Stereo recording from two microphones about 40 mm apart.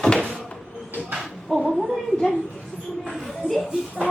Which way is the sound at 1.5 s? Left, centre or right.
Centre.